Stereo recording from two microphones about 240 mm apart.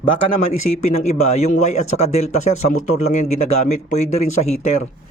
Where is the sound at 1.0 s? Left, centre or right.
Left.